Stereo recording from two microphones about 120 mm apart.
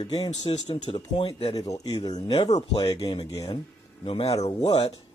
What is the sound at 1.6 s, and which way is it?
Speech, 30° left (ahead or behind).